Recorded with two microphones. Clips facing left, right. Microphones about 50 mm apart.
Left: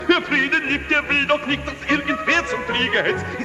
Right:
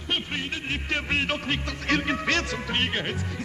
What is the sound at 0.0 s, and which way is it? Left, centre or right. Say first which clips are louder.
Speech: left 12 dB; left.